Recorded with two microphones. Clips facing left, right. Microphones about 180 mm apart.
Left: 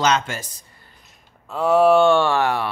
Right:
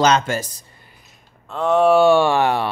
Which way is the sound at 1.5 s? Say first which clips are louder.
Even; 5° left (ahead or behind).